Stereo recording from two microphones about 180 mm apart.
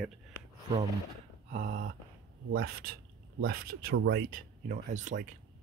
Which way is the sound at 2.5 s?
55° right (ahead or behind).